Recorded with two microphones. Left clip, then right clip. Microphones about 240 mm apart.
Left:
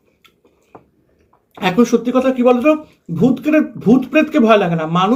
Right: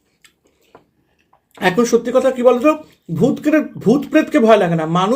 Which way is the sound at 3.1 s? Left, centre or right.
Right.